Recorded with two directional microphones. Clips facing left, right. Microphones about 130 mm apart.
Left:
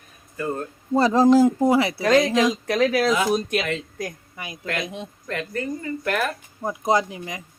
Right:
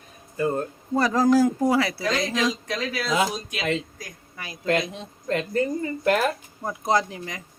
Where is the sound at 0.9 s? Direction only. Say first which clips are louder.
Left 3 dB; 25° left (ahead or behind).